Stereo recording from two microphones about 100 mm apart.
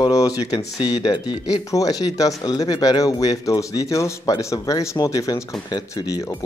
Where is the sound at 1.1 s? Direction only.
50° left (ahead or behind).